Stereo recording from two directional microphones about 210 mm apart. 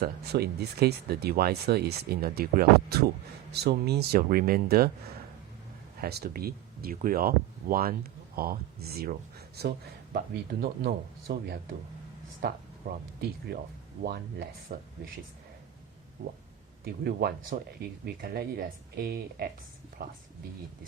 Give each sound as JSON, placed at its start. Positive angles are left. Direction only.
{"t": 0.0, "sound": "speech", "side_deg": -50}
{"t": 6.0, "sound": "speech", "side_deg": -50}
{"t": 14.0, "sound": "speech", "side_deg": -50}
{"t": 16.2, "sound": "a sound", "side_deg": -40}
{"t": 16.8, "sound": "speech", "side_deg": -50}